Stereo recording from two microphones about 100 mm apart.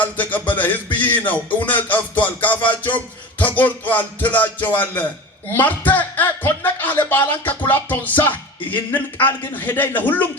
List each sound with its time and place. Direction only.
0.0 s speech: 15° left (ahead or behind)